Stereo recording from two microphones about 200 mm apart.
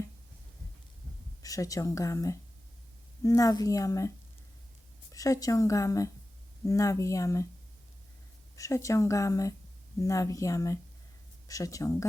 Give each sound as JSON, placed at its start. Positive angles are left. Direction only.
{"t": 1.4, "sound": "speech", "side_deg": 15}
{"t": 5.1, "sound": "speech", "side_deg": 15}
{"t": 8.5, "sound": "speech", "side_deg": 15}